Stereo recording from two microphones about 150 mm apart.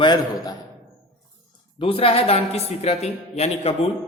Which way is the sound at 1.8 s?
40° left (ahead or behind).